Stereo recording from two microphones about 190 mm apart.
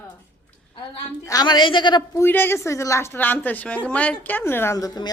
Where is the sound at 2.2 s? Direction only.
10° left (ahead or behind).